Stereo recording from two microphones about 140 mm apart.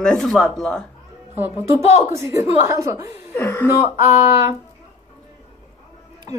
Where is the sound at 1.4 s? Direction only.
15° right (ahead or behind).